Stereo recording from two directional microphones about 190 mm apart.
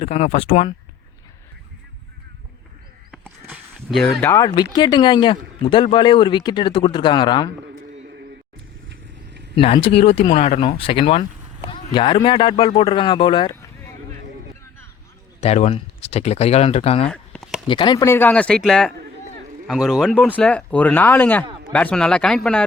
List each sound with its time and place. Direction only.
0.0 s speech: 35° left (ahead or behind)
3.8 s speech: centre (ahead or behind)
4.2 s speech: 15° left (ahead or behind)
9.6 s speech: 30° left (ahead or behind)
15.4 s speech: 35° left (ahead or behind)
17.1 s a sound: centre (ahead or behind)
17.7 s speech: 25° left (ahead or behind); by 22.4 s 5° left (ahead or behind)